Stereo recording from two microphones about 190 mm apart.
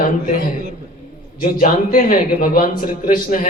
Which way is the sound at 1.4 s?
45° left (ahead or behind).